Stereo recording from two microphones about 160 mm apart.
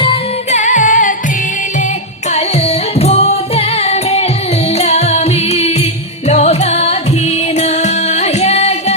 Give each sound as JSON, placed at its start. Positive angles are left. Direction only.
{"t": 0.5, "sound": "music", "side_deg": 50}
{"t": 3.0, "sound": "music", "side_deg": 40}